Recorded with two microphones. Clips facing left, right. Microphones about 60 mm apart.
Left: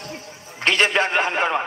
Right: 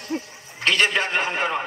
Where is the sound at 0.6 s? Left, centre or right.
Left.